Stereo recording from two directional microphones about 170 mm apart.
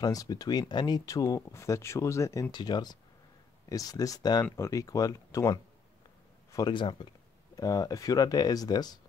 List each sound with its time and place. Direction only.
0.0 s speech: 20° left (ahead or behind)